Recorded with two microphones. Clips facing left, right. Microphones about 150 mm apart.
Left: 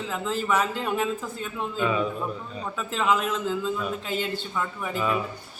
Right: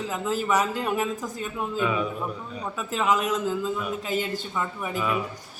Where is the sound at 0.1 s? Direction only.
10° right (ahead or behind).